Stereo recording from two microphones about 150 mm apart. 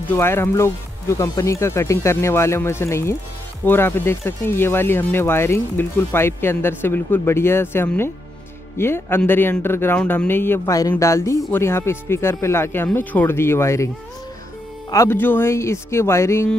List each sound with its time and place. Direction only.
0.1 s speech: 15° left (ahead or behind)
14.9 s speech: 20° left (ahead or behind)